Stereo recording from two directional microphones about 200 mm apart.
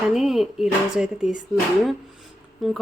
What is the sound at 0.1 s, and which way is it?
A woman's voice, centre (ahead or behind).